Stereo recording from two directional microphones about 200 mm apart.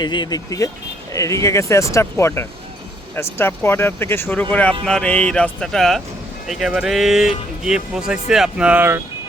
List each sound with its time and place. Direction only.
0.0 s speech: 20° left (ahead or behind); by 9.0 s 10° right (ahead or behind)